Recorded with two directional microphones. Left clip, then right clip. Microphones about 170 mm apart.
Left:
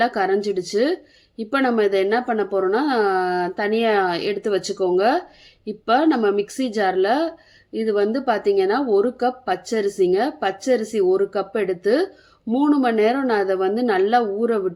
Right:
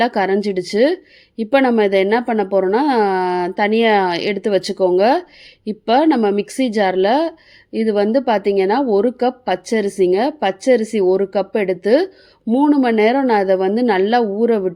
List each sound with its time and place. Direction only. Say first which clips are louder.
0.0 s speech: right 3 dB; 15° right (ahead or behind)